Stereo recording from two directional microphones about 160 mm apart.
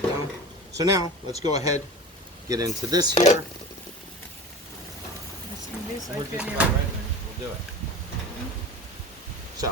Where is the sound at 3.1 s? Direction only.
45° left (ahead or behind).